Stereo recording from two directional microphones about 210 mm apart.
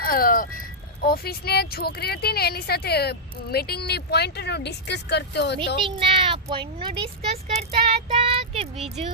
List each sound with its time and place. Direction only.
0.0 s vehicle: 45° left (ahead or behind)
1.0 s a woman's voice: 45° left (ahead or behind)
5.8 s speech: 25° right (ahead or behind)